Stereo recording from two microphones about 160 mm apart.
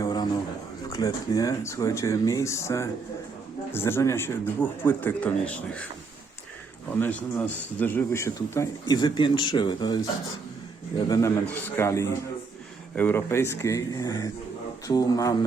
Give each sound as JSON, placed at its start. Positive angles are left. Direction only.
{"t": 0.0, "sound": "a sound", "side_deg": 25}
{"t": 0.9, "sound": "speech", "side_deg": 20}
{"t": 6.9, "sound": "speech", "side_deg": 10}